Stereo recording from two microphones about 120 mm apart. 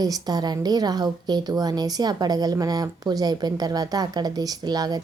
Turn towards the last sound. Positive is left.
turn(degrees=-35)  # may be behind; listen again after turning